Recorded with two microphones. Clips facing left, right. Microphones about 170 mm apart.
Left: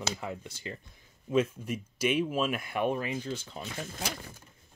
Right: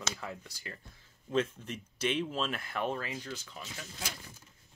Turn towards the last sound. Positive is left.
turn(degrees=55)  # may be behind; listen again after turning